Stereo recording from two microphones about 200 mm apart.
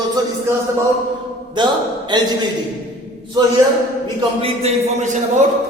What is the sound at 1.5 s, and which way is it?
Speech, 20° right (ahead or behind).